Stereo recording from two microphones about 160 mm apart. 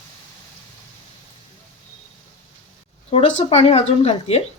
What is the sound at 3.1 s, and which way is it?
Speech, 40° left (ahead or behind).